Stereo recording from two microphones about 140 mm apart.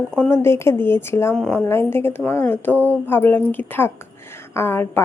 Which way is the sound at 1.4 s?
5° left (ahead or behind).